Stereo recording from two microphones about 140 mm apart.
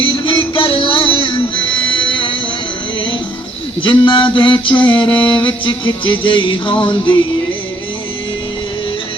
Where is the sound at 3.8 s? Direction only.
35° left (ahead or behind).